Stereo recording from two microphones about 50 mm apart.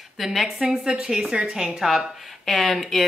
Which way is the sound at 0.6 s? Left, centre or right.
Centre.